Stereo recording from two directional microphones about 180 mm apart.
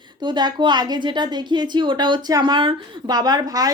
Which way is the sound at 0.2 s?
25° right (ahead or behind).